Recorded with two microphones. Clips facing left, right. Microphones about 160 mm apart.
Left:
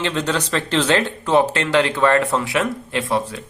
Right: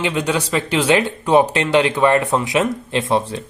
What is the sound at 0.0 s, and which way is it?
Speech, 10° right (ahead or behind).